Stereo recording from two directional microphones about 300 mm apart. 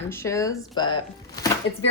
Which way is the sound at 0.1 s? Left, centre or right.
Centre.